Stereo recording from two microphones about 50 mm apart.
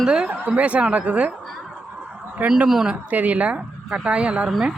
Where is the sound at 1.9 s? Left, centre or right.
Right.